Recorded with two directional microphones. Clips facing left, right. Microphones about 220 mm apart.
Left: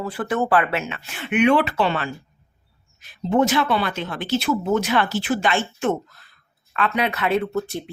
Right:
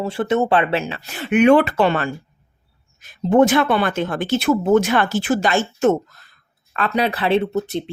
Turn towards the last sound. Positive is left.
turn(degrees=-20)  # may be behind; listen again after turning